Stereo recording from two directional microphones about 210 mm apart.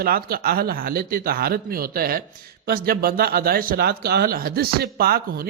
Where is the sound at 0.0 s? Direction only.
45° right (ahead or behind).